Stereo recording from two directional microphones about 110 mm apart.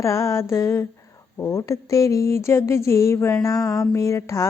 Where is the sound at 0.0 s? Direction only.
25° left (ahead or behind).